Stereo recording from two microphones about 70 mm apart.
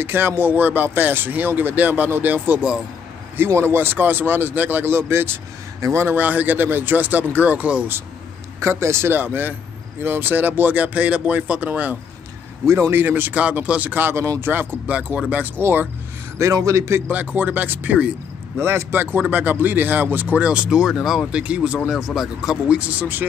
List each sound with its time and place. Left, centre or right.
0.0 s speech: right
3.3 s speech: right
5.8 s a man's voice: right
6.0 s speech: right
8.5 s speech: right
16.5 s a man's voice: right
17.1 s speech: right
18.6 s speech: right; by 20.9 s centre
20.9 s speech: centre
21.3 s speech: centre
22.0 s speech: centre
22.7 s speech: right